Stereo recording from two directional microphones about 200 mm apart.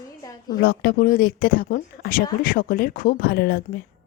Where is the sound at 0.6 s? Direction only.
50° left (ahead or behind).